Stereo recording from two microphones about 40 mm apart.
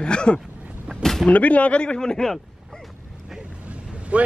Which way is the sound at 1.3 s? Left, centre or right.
Left.